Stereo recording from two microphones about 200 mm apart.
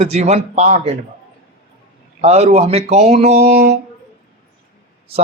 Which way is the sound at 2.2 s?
30° right (ahead or behind).